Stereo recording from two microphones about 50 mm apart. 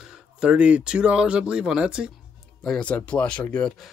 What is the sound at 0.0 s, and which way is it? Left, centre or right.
Speech, centre.